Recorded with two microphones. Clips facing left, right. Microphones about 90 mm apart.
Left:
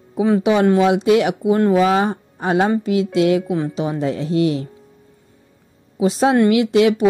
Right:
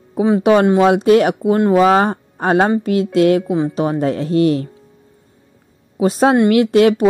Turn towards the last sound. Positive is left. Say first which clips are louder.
# right 3 dB
turn(degrees=-55)  # may be behind; listen again after turning